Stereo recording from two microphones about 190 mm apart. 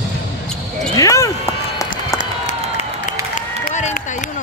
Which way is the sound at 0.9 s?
15° left (ahead or behind).